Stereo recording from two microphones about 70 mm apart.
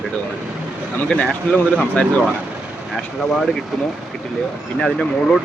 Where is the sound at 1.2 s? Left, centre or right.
Centre.